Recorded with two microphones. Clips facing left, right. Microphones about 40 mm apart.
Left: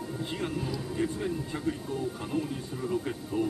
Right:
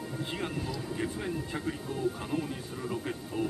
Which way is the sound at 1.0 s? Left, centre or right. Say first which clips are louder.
Left 4 dB; centre.